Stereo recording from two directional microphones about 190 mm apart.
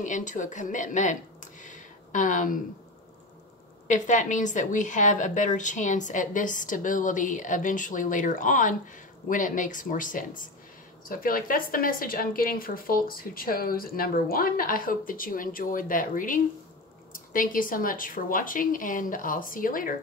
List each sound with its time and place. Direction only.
0.0 s speech: 40° left (ahead or behind)
3.8 s a woman's voice: 40° left (ahead or behind)